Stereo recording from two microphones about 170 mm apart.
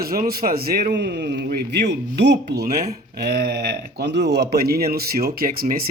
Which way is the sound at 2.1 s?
90° right.